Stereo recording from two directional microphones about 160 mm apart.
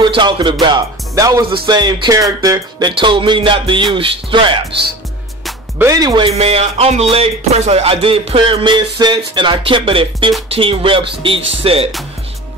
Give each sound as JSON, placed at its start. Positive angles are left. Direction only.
{"t": 0.0, "sound": "music", "side_deg": -30}
{"t": 3.0, "sound": "speech", "side_deg": -30}
{"t": 5.8, "sound": "speech", "side_deg": -20}